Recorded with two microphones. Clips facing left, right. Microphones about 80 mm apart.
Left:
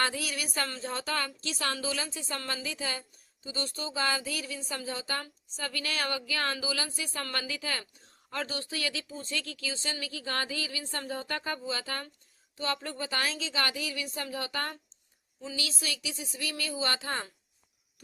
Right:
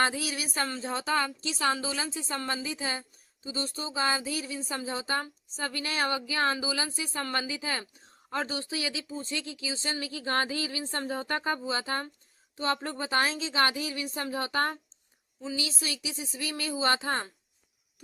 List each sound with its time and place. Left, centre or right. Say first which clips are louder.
0.0 s speech: right 3 dB; right
9.8 s speech: right 3 dB; right
17.1 s speech: right 4 dB; right